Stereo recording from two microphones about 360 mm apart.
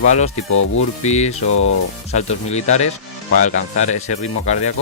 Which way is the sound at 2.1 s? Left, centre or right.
Centre.